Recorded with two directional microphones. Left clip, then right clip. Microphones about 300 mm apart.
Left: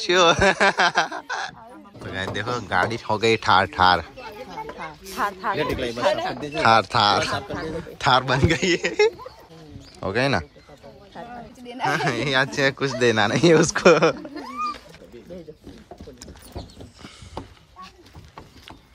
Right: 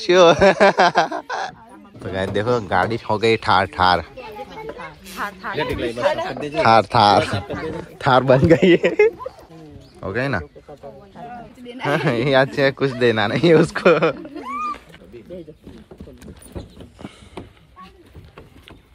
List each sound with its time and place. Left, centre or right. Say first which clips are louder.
0.0 s speech: right 5 dB; centre
4.7 s speech: left 4 dB; left
6.6 s speech: right 4 dB; centre
11.6 s speech: right 2 dB; centre
14.1 s cat: right 2 dB; centre